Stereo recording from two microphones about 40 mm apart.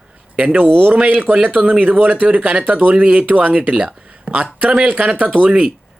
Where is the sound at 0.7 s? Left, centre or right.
Right.